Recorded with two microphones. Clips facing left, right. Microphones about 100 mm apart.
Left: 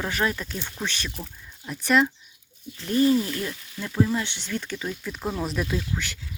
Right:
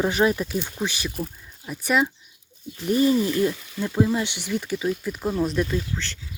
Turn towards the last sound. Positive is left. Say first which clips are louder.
# right 1 dB
turn(degrees=5)  # may be behind; listen again after turning